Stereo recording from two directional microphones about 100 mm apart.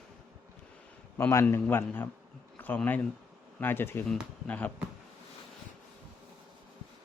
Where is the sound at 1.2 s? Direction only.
25° left (ahead or behind).